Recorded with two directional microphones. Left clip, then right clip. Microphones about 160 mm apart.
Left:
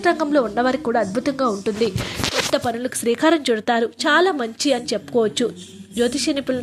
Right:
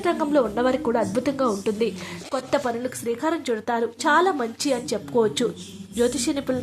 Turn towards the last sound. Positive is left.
turn(degrees=5)  # may be behind; listen again after turning